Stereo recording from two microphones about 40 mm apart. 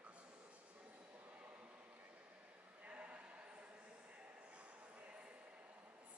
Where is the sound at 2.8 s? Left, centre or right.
Right.